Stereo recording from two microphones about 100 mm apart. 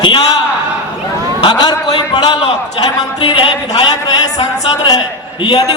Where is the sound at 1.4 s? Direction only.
45° left (ahead or behind).